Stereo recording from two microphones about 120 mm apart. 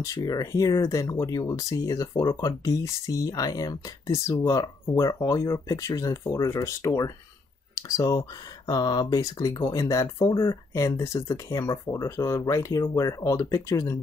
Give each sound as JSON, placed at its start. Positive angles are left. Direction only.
{"t": 0.0, "sound": "speech", "side_deg": 30}